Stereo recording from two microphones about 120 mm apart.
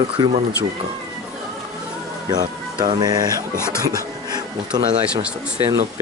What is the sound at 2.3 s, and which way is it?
Speech, 35° right (ahead or behind).